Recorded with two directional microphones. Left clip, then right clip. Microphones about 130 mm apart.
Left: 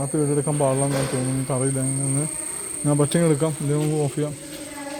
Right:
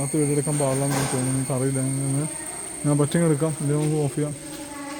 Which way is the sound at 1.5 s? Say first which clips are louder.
Left 3 dB; 5° left (ahead or behind).